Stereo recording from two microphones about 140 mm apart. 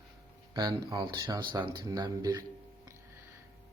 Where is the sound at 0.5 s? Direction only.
25° right (ahead or behind).